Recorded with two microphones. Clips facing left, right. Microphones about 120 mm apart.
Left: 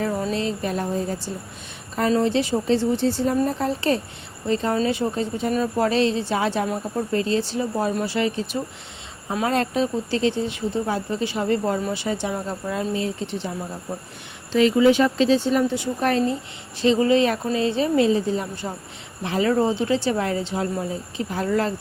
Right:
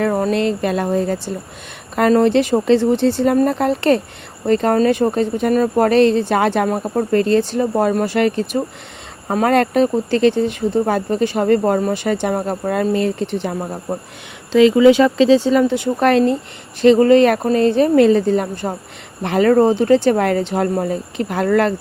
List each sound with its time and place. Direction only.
0.0 s speech: 65° right (ahead or behind)
2.0 s speech: 65° right (ahead or behind)
13.9 s speech: 45° right (ahead or behind)
14.5 s speech: 90° right; by 16.4 s 70° right (ahead or behind)
16.8 s speech: 60° right (ahead or behind)